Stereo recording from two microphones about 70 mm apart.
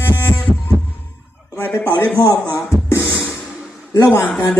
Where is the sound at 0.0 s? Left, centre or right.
Left.